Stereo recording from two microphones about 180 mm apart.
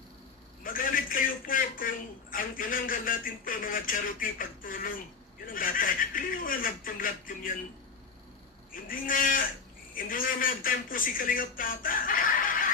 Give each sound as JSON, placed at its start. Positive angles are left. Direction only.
{"t": 0.6, "sound": "a sound", "side_deg": 50}
{"t": 2.3, "sound": "a man's voice", "side_deg": 50}
{"t": 8.7, "sound": "a man's voice", "side_deg": 50}